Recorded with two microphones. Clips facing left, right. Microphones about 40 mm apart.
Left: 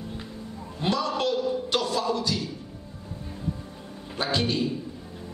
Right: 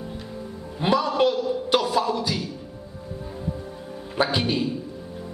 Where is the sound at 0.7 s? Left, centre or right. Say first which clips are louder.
Right 6 dB; centre.